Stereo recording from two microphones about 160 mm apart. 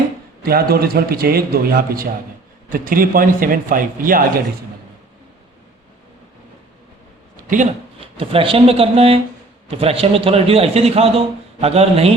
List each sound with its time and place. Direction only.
0.4 s a man's voice: 70° right (ahead or behind)
7.3 s a sound: 55° right (ahead or behind)
8.0 s a man's voice: 35° right (ahead or behind)